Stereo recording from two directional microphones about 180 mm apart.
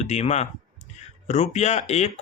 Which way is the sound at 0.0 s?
40° left (ahead or behind).